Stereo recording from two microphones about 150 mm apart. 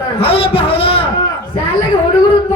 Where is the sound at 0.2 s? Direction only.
40° left (ahead or behind).